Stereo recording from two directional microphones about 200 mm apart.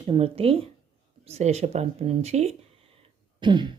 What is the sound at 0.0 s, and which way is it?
Speech, 30° right (ahead or behind).